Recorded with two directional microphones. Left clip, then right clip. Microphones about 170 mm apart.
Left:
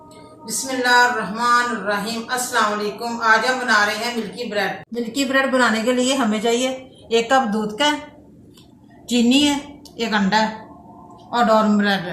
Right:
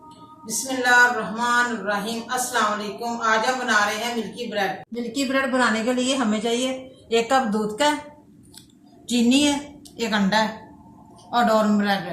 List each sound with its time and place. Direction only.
0.8 s speech: centre (ahead or behind)
7.1 s speech: centre (ahead or behind)
9.0 s speech: 5° right (ahead or behind)